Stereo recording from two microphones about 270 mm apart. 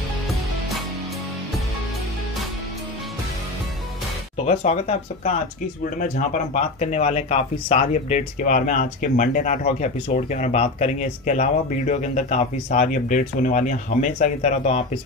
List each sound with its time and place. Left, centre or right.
4.5 s speech: left